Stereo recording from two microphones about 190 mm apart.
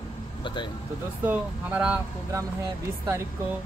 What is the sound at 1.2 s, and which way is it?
Speech, 10° right (ahead or behind).